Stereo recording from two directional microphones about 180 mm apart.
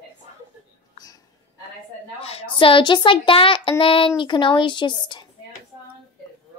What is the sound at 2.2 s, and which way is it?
A child's voice, 30° left (ahead or behind).